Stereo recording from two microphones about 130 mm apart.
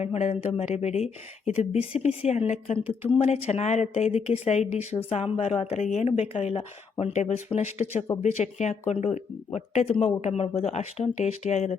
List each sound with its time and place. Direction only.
0.0 s speech: 55° left (ahead or behind)